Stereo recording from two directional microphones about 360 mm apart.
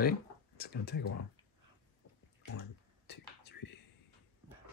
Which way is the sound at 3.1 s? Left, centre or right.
Left.